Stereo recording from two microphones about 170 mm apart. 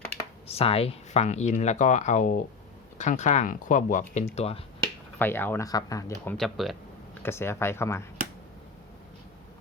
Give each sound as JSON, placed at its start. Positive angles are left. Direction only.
{"t": 0.4, "sound": "speech", "side_deg": 35}
{"t": 4.8, "sound": "speech", "side_deg": 10}
{"t": 6.3, "sound": "speech", "side_deg": 0}
{"t": 7.2, "sound": "speech", "side_deg": 15}